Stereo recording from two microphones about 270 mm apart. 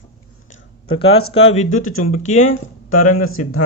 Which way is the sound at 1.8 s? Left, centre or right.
Left.